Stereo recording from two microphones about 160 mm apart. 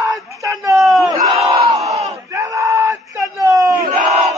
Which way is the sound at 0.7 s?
Centre (ahead or behind).